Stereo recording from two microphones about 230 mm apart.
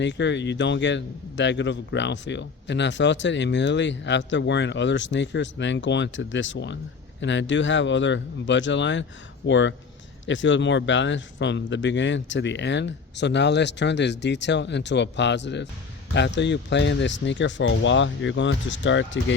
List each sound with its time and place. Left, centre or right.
0.0 s a man's voice: left